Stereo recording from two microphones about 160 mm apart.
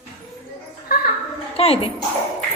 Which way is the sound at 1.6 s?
35° left (ahead or behind).